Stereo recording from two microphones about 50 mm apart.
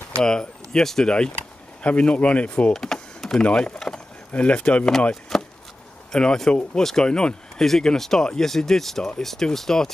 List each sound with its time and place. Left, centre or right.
0.1 s speech: centre
1.8 s speech: left
2.7 s typing: centre
3.4 s speech: centre
4.3 s speech: left
5.3 s chop: centre
6.1 s speech: centre